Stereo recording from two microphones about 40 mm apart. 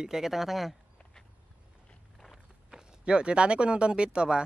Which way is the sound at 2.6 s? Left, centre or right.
Right.